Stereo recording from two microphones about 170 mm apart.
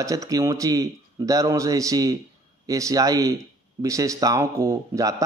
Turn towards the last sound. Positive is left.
turn(degrees=-20)  # may be behind; listen again after turning